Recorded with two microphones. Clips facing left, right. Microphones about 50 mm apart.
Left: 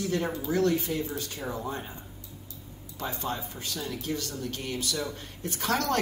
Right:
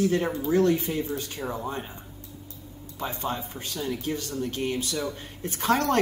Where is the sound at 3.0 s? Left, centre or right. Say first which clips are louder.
Right 2 dB; right.